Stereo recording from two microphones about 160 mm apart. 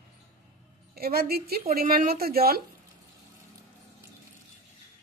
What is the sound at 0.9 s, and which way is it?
Speech, 70° right (ahead or behind).